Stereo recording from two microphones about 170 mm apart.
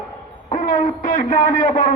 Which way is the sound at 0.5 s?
50° left (ahead or behind).